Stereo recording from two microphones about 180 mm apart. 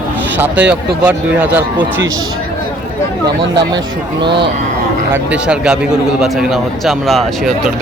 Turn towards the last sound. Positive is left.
turn(degrees=0)  # may be behind; listen again after turning